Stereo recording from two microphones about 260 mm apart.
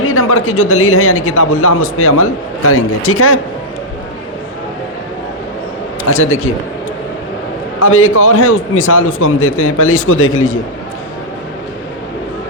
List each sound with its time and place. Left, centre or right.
0.0 s a man's voice: left
7.8 s a man's voice: left